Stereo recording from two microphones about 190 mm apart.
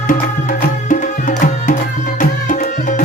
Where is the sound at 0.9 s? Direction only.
40° left (ahead or behind).